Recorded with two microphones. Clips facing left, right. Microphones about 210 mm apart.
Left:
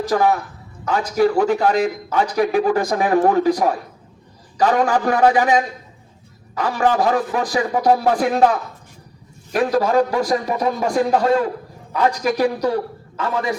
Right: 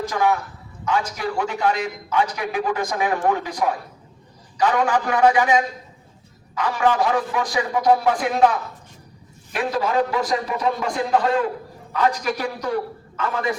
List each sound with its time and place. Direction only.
0.1 s a man's voice: 40° left (ahead or behind)